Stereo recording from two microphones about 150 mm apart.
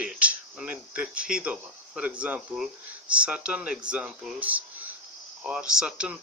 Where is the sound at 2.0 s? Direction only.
10° right (ahead or behind).